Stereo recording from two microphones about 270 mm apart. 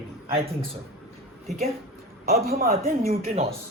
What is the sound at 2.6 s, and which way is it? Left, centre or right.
Speech, right.